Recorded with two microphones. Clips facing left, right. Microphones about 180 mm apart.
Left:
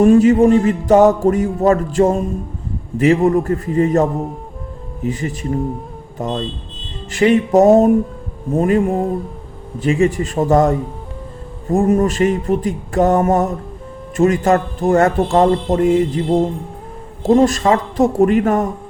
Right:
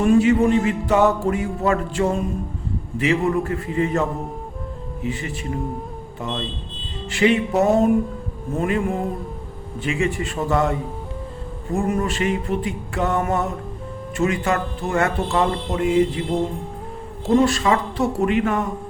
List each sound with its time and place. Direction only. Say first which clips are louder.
0.0 s speech: left 6 dB; 40° left (ahead or behind)